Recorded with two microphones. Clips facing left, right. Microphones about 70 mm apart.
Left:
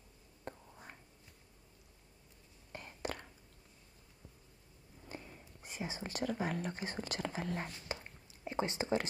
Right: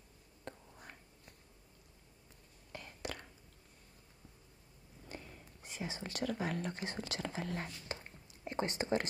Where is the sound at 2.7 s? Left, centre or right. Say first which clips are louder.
Left 2 dB; left.